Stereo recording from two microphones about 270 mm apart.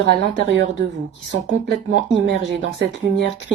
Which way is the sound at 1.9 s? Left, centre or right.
Right.